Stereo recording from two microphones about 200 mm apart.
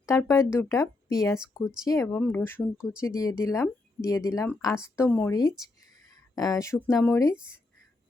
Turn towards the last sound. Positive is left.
turn(degrees=10)  # may be behind; listen again after turning